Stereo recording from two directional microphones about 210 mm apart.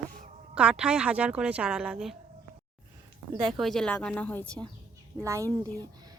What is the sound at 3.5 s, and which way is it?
A woman's voice, centre (ahead or behind).